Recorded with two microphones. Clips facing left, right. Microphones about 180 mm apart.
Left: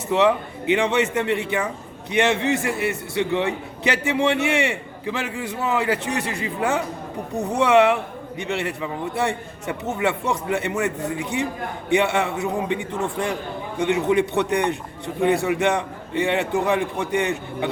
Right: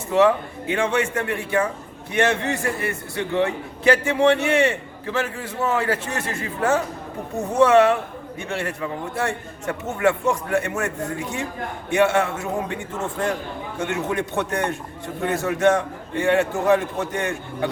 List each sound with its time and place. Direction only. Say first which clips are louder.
0.1 s a man's voice: right 1 dB; 20° left (ahead or behind)